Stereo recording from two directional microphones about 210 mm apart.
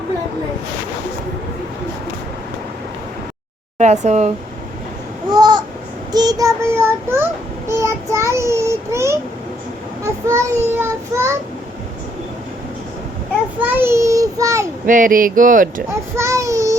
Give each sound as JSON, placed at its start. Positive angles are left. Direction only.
{"t": 4.0, "sound": "speech", "side_deg": -30}
{"t": 5.3, "sound": "babbling", "side_deg": -20}
{"t": 6.1, "sound": "a child's voice", "side_deg": -20}
{"t": 7.7, "sound": "child singing", "side_deg": -15}
{"t": 10.0, "sound": "a child's voice", "side_deg": -15}
{"t": 13.7, "sound": "a child's voice", "side_deg": -10}
{"t": 14.8, "sound": "speech", "side_deg": -40}
{"t": 16.1, "sound": "a child's voice", "side_deg": -15}